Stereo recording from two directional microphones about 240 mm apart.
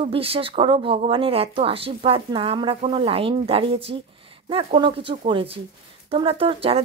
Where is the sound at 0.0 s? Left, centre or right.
Right.